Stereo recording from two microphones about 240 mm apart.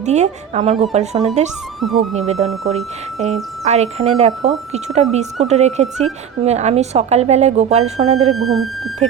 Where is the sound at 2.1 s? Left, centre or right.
Right.